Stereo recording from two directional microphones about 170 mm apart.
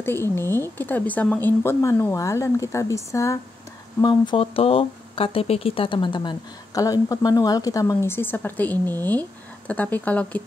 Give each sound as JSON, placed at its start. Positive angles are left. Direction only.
{"t": 0.0, "sound": "speech", "side_deg": 15}